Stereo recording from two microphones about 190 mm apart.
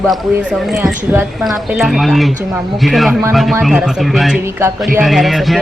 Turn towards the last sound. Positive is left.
turn(degrees=0)  # may be behind; listen again after turning